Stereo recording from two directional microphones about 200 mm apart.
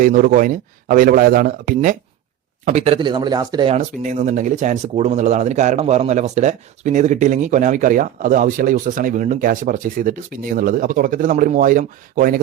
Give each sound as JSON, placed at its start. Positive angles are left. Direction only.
{"t": 0.0, "sound": "speech", "side_deg": -40}
{"t": 2.6, "sound": "speech", "side_deg": -35}